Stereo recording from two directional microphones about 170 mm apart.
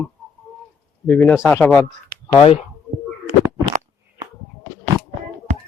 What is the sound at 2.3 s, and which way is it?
Speech, 30° left (ahead or behind).